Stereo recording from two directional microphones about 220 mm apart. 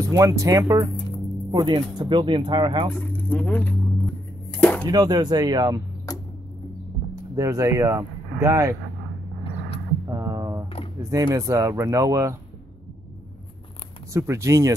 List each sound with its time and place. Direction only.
0.1 s speech: 15° right (ahead or behind)
2.9 s a sound: 10° left (ahead or behind)
4.8 s speech: 20° right (ahead or behind)
6.1 s music: 15° left (ahead or behind)
7.3 s speech: 15° right (ahead or behind)
10.0 s a sound: 15° right (ahead or behind)
11.0 s speech: 15° right (ahead or behind)
14.1 s speech: 15° right (ahead or behind)